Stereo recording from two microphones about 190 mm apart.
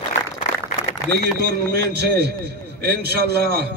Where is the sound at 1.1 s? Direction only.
60° right (ahead or behind).